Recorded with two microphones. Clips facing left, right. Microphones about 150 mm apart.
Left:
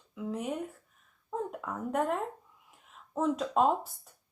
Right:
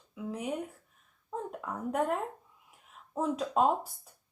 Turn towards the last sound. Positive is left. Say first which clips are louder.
# even
turn(degrees=0)  # may be behind; listen again after turning